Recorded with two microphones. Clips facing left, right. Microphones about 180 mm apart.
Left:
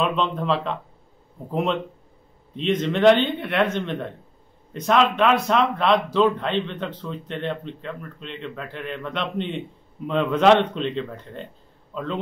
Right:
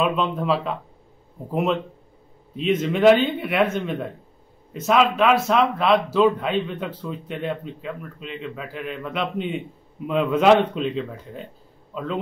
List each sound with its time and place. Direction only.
0.0 s a man's voice: 5° right (ahead or behind)